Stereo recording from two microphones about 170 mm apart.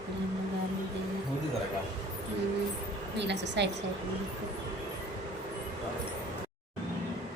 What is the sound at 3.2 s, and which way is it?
Speech, 90° right.